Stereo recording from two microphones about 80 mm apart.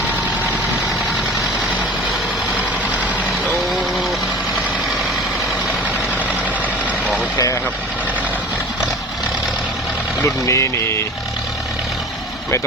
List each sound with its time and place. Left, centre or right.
10.2 s speech: left